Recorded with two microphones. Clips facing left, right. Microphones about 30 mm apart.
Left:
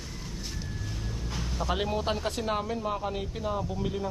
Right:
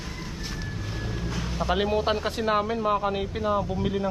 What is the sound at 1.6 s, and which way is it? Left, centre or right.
Speech, centre.